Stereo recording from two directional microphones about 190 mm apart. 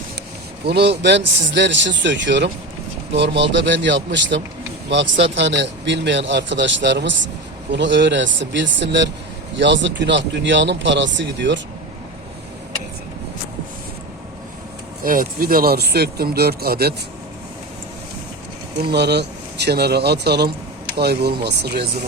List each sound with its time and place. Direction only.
0.7 s a man's voice: 65° right (ahead or behind)
15.0 s speech: 45° right (ahead or behind)
18.8 s speech: 60° right (ahead or behind)